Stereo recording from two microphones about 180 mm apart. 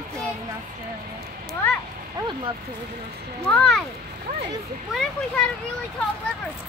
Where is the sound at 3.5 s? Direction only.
5° left (ahead or behind).